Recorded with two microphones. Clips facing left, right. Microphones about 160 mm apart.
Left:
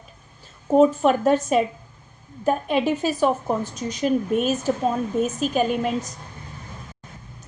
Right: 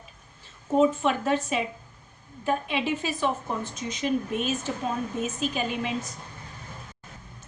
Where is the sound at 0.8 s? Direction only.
40° left (ahead or behind).